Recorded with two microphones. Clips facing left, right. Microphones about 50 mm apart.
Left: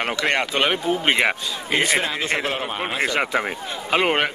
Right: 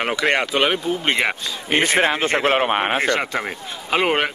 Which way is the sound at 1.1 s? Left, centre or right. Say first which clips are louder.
Left 1 dB; centre.